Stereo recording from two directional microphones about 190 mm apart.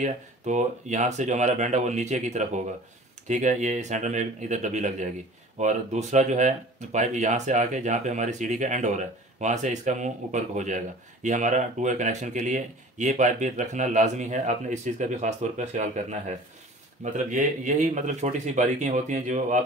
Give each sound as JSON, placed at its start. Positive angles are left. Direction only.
{"t": 0.0, "sound": "speech", "side_deg": -40}